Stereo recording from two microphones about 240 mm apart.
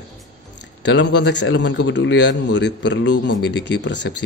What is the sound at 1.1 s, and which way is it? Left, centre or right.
Speech, left.